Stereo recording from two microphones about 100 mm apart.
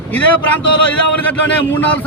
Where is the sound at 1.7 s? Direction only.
20° left (ahead or behind).